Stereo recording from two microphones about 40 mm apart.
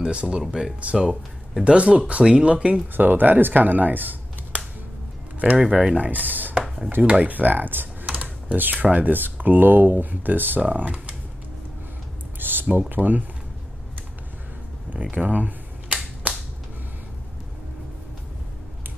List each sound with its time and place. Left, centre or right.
0.0 s speech: right
0.4 s speech: centre
1.6 s speech: right
2.9 s speech: right
5.6 s speech: centre
5.9 s speech: right
6.6 s a sound: centre
7.0 s speech: right
10.6 s speech: right
12.4 s a sound: right
12.9 s speech: right
14.9 s cap gun: right